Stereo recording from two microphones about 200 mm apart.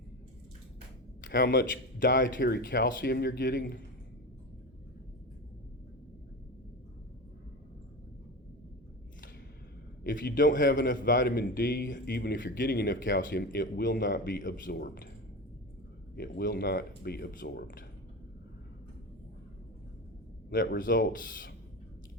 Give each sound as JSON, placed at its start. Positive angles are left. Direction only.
{"t": 1.3, "sound": "a man's voice", "side_deg": 55}
{"t": 2.0, "sound": "a man's voice", "side_deg": 40}
{"t": 2.2, "sound": "a man's voice", "side_deg": 55}
{"t": 10.0, "sound": "a man's voice", "side_deg": 45}
{"t": 14.3, "sound": "a man's voice", "side_deg": 45}
{"t": 16.1, "sound": "a man's voice", "side_deg": 55}
{"t": 20.5, "sound": "a man's voice", "side_deg": 45}